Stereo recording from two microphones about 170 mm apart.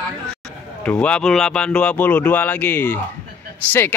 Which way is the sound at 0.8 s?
5° left (ahead or behind).